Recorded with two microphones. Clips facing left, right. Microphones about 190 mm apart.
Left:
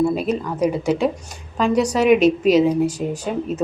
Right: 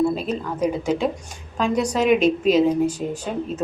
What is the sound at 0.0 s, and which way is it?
A woman's voice, 10° left (ahead or behind).